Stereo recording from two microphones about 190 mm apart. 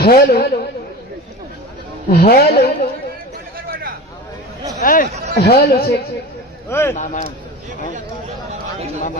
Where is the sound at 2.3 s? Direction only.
55° left (ahead or behind).